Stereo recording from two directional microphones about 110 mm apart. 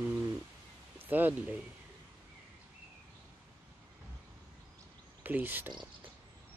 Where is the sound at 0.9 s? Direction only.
15° right (ahead or behind).